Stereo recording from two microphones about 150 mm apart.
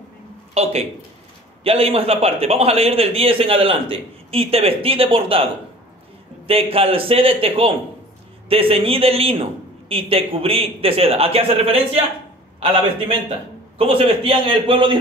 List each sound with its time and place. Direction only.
0.6 s a sound: 40° right (ahead or behind)
1.6 s a man's voice: 40° right (ahead or behind)
13.7 s a man's voice: 40° right (ahead or behind)